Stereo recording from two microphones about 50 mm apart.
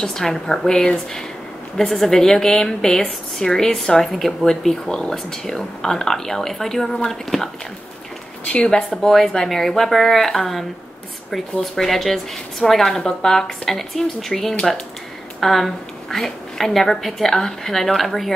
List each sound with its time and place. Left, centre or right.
0.0 s speech: centre
8.5 s speech: left
8.7 s a woman's voice: centre